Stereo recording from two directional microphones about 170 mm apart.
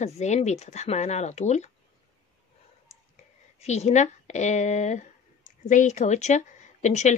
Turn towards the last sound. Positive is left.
turn(degrees=45)  # may be behind; listen again after turning